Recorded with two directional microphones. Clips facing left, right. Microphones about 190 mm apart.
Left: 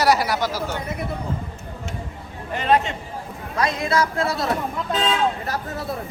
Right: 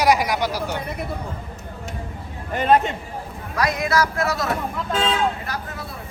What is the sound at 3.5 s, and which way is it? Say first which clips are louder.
Speech: even; 25° left (ahead or behind).